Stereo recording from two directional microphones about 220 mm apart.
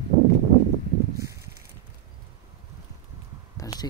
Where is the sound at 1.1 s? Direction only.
15° right (ahead or behind).